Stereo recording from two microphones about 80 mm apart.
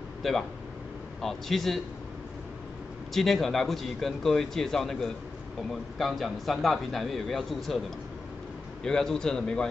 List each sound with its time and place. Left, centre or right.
0.2 s a man's voice: centre
3.1 s a man's voice: centre
8.8 s a man's voice: centre